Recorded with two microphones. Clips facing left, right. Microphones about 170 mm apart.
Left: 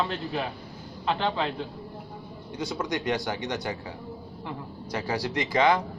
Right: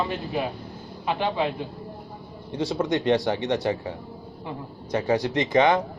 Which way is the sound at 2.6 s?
25° right (ahead or behind).